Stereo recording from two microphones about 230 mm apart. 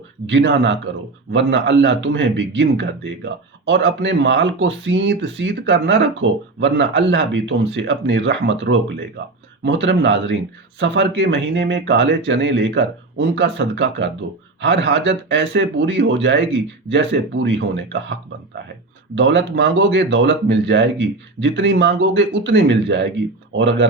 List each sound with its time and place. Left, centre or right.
0.3 s a man's voice: right
19.1 s a man's voice: right